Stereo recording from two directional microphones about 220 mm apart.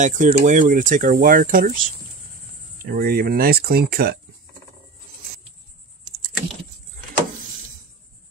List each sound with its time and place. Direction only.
0.0 s speech: 35° right (ahead or behind)
2.8 s speech: 40° right (ahead or behind)